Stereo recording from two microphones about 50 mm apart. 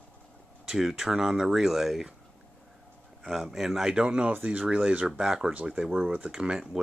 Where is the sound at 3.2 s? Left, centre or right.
Centre.